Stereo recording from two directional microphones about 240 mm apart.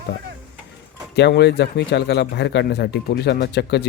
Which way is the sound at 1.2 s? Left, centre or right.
Left.